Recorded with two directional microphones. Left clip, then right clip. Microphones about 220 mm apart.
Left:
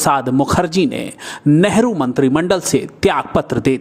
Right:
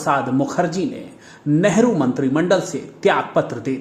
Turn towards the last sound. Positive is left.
turn(degrees=35)  # may be behind; listen again after turning